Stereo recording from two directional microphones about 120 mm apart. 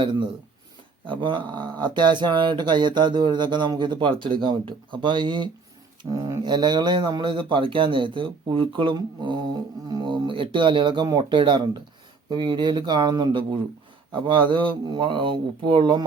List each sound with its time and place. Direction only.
0.0 s speech: 40° right (ahead or behind)
6.0 s speech: 30° right (ahead or behind)
14.3 s speech: 45° right (ahead or behind)